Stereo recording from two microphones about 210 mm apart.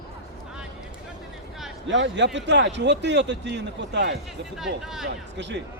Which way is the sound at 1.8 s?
60° right (ahead or behind).